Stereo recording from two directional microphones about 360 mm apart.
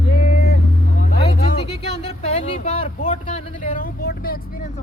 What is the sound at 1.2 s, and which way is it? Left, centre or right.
Music, centre.